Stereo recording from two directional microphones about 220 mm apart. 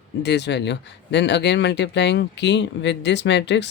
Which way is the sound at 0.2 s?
50° left (ahead or behind).